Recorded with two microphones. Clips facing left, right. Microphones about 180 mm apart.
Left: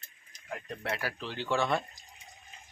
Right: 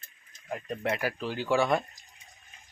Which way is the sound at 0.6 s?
15° right (ahead or behind).